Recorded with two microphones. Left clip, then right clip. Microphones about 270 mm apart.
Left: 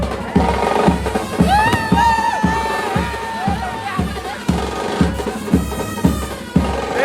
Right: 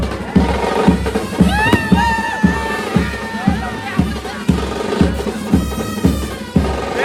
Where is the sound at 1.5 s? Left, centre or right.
Left.